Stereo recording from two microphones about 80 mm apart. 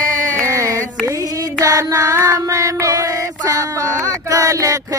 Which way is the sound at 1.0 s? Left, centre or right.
Right.